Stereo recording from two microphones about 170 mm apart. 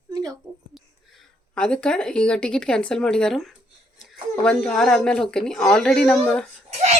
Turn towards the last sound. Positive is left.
turn(degrees=-40)  # may be behind; listen again after turning